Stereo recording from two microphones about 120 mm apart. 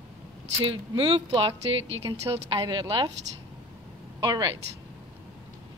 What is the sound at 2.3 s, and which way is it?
Speech, 30° right (ahead or behind).